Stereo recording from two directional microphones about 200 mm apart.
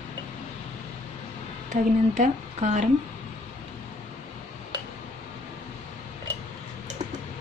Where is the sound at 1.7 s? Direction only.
40° right (ahead or behind).